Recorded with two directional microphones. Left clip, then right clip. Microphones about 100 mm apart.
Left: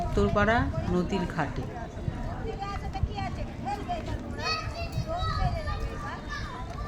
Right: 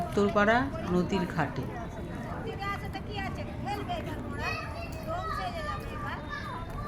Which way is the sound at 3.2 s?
35° right (ahead or behind).